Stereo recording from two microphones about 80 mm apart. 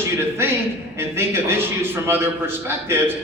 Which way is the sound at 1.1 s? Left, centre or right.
Right.